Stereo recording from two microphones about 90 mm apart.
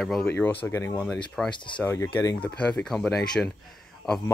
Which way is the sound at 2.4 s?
15° left (ahead or behind).